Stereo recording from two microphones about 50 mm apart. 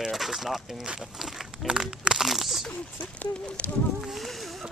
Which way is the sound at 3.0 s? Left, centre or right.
Left.